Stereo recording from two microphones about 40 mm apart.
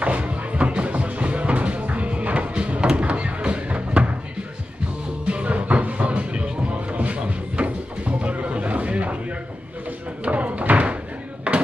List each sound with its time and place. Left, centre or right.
0.0 s music: right
5.2 s music: right
10.2 s a sound: right